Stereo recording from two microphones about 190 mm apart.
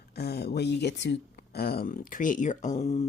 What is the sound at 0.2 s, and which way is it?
Speech, 55° left (ahead or behind).